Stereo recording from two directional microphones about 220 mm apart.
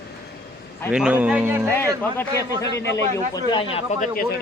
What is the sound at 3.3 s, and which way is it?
Speech, 20° left (ahead or behind).